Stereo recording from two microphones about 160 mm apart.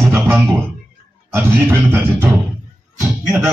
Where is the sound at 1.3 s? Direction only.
10° right (ahead or behind).